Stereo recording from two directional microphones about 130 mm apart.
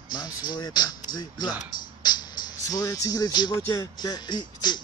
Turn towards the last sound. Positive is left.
turn(degrees=35)  # may be behind; listen again after turning